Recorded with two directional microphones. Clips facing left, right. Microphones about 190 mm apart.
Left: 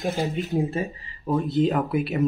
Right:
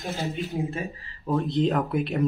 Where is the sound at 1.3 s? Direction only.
5° left (ahead or behind).